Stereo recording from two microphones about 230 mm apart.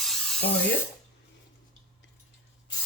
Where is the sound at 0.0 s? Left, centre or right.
Centre.